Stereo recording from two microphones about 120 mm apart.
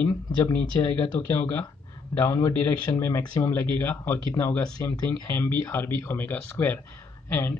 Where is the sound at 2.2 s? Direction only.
25° left (ahead or behind).